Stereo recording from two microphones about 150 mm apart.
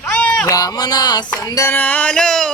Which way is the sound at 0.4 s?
25° left (ahead or behind).